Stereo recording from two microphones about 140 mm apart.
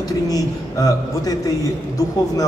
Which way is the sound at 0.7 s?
25° left (ahead or behind).